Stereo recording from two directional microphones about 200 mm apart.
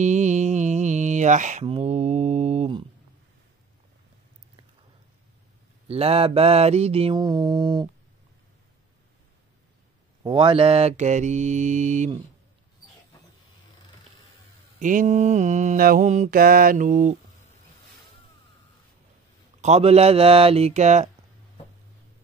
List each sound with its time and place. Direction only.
0.0 s mantra: 35° right (ahead or behind)
5.9 s mantra: 30° right (ahead or behind)
10.2 s mantra: 25° right (ahead or behind)
14.8 s mantra: 40° right (ahead or behind)
19.6 s mantra: 30° right (ahead or behind)